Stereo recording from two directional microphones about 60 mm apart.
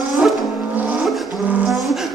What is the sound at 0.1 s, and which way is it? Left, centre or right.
Vehicle, centre.